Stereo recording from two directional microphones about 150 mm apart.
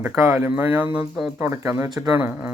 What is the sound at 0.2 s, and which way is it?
Speech, 20° right (ahead or behind).